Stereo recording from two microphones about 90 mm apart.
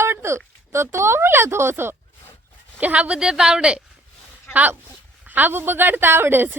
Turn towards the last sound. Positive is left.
turn(degrees=-25)  # may be behind; listen again after turning